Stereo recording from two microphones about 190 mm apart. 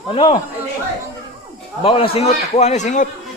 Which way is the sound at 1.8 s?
30° left (ahead or behind).